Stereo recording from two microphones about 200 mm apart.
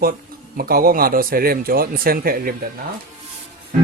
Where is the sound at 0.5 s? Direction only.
45° right (ahead or behind).